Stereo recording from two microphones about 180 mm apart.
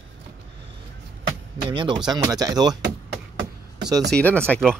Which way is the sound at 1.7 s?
25° right (ahead or behind).